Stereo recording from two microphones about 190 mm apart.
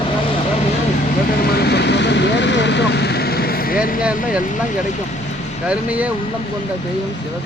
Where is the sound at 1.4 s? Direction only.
55° left (ahead or behind).